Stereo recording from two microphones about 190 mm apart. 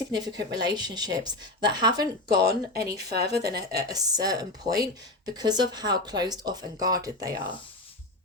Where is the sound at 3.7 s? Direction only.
20° right (ahead or behind).